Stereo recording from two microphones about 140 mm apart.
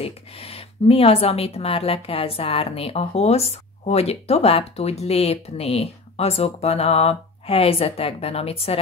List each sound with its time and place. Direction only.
0.0 s speech: 45° left (ahead or behind)